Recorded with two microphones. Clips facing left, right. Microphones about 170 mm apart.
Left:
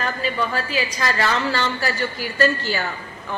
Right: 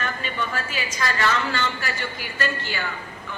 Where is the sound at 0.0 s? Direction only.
35° left (ahead or behind).